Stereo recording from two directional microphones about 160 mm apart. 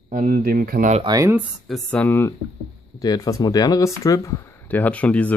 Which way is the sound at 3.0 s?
25° left (ahead or behind).